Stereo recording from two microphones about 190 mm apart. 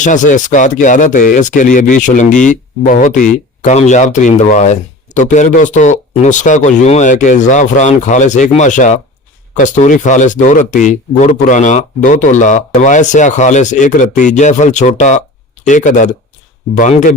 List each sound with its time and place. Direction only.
0.0 s speech: 40° left (ahead or behind)